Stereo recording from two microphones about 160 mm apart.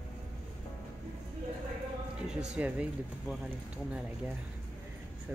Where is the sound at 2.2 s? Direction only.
5° right (ahead or behind).